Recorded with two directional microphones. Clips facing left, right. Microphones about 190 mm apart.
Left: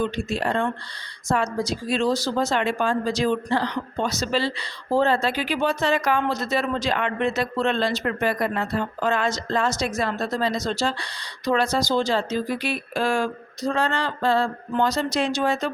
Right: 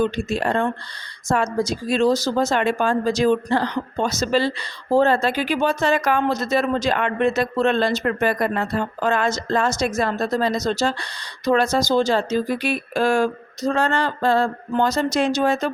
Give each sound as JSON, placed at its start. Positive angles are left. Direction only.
{"t": 0.0, "sound": "speech", "side_deg": -45}